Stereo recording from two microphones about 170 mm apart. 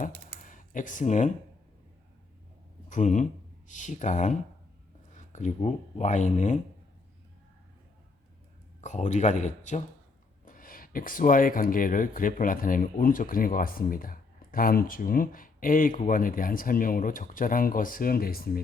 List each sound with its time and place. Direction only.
0.4 s speech: 50° left (ahead or behind)
2.9 s speech: 45° left (ahead or behind)
8.8 s speech: 45° left (ahead or behind); by 18.6 s 60° left (ahead or behind)